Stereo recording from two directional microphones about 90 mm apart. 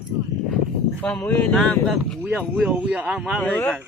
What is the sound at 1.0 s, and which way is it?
Speech, 20° left (ahead or behind).